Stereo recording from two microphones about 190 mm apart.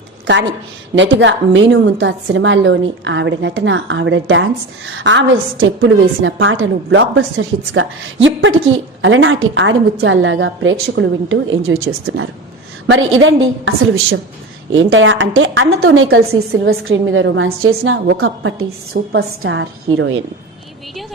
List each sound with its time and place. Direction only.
0.3 s a woman's voice: 75° right (ahead or behind)
9.0 s a woman's voice: 90° right